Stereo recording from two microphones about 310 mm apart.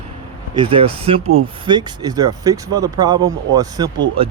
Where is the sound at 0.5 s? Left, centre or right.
Centre.